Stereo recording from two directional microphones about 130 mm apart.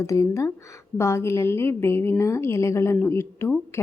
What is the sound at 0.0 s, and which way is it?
Speech, 25° left (ahead or behind).